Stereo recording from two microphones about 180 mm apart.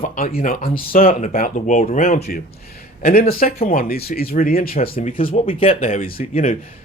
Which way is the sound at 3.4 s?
50° left (ahead or behind).